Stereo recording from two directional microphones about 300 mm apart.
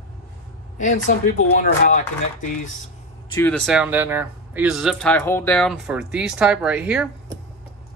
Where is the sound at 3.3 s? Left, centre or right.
Centre.